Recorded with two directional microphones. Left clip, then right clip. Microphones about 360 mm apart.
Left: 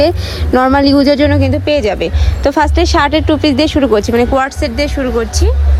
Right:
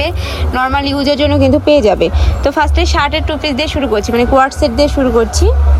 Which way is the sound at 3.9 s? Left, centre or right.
Centre.